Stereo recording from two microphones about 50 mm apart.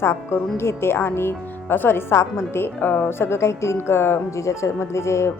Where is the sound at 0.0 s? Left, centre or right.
Left.